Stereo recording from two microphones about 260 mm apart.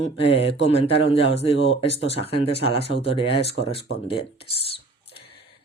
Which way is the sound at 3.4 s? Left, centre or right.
Left.